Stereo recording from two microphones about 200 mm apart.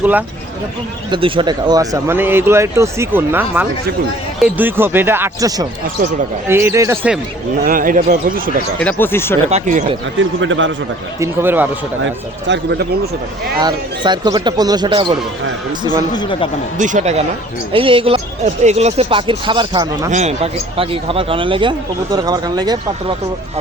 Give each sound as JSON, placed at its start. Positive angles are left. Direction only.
{"t": 0.0, "sound": "speech", "side_deg": -10}
{"t": 1.1, "sound": "speech", "side_deg": -25}
{"t": 7.6, "sound": "speech", "side_deg": -45}
{"t": 8.8, "sound": "speech", "side_deg": 10}
{"t": 9.5, "sound": "speech", "side_deg": -35}
{"t": 10.2, "sound": "a man's voice", "side_deg": -70}
{"t": 11.2, "sound": "speech", "side_deg": -10}
{"t": 12.0, "sound": "speech", "side_deg": -60}
{"t": 13.6, "sound": "speech", "side_deg": -20}
{"t": 16.1, "sound": "speech", "side_deg": 25}
{"t": 16.7, "sound": "speech", "side_deg": -40}
{"t": 20.1, "sound": "speech", "side_deg": -35}